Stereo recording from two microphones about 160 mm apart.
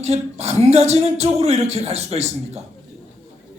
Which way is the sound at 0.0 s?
40° right (ahead or behind).